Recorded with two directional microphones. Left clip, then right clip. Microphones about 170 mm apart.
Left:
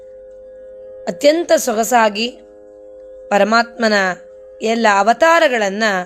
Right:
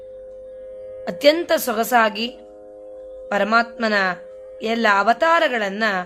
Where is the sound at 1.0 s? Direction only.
25° left (ahead or behind).